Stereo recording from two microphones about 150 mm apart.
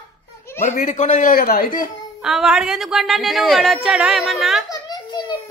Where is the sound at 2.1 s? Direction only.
5° right (ahead or behind).